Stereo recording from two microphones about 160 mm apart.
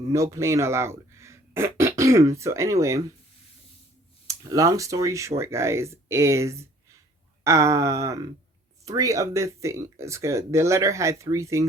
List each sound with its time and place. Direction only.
0.1 s speech: 20° right (ahead or behind)
4.3 s speech: 20° right (ahead or behind)